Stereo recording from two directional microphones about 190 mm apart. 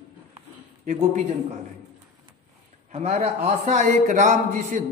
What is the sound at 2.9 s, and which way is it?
A man's voice, 35° right (ahead or behind).